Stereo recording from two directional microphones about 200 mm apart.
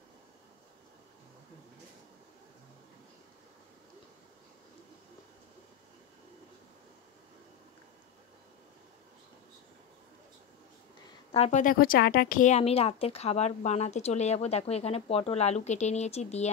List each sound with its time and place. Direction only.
11.3 s speech: 35° left (ahead or behind)